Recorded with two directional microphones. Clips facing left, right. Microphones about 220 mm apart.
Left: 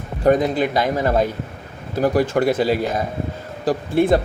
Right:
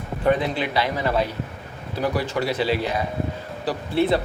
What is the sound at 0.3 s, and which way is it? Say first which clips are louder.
Speech: left 5 dB; 40° left (ahead or behind).